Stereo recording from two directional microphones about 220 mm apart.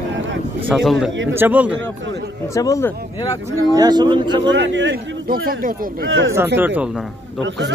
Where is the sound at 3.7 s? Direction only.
20° right (ahead or behind).